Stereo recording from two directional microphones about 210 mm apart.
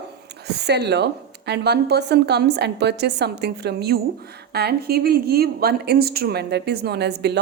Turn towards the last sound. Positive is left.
turn(degrees=-50)  # may be behind; listen again after turning